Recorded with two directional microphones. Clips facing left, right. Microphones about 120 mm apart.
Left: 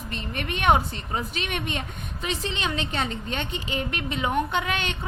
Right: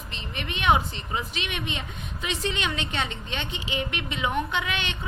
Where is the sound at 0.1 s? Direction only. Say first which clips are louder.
Left 4 dB; 45° left (ahead or behind).